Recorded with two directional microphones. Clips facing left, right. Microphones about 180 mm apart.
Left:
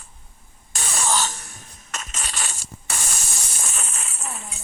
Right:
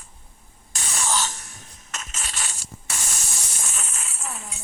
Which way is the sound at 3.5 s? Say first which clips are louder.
Left 4 dB; 60° left (ahead or behind).